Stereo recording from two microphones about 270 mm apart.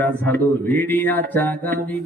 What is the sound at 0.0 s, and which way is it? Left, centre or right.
A man's voice, centre.